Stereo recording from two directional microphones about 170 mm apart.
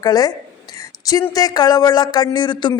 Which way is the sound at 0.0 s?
20° left (ahead or behind).